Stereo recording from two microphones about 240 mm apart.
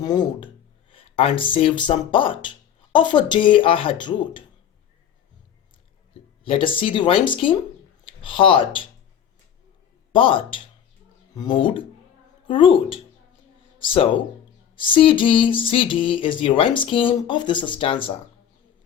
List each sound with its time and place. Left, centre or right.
0.0 s speech: centre
6.4 s speech: left
10.1 s a man's voice: left